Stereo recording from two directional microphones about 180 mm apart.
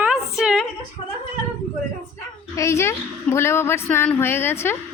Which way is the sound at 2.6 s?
15° left (ahead or behind).